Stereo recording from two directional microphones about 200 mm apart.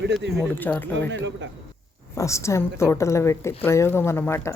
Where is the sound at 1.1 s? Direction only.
65° right (ahead or behind).